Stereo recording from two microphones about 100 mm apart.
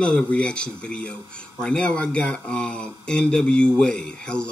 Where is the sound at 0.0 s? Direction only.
10° left (ahead or behind).